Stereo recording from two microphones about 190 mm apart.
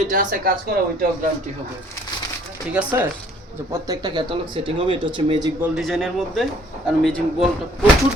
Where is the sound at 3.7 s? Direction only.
20° right (ahead or behind).